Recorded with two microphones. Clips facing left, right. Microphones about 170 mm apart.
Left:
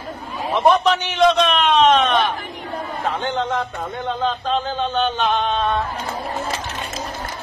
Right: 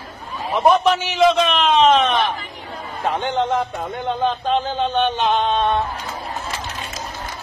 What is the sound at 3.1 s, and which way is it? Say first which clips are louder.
A man's voice: right 4 dB; 10° right (ahead or behind).